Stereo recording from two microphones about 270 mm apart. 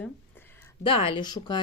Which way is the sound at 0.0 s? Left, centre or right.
Centre.